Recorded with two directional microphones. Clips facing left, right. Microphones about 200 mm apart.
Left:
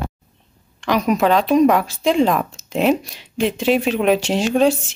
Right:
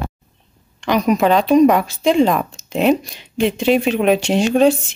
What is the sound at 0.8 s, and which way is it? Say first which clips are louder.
Speech: right 2 dB; centre (ahead or behind).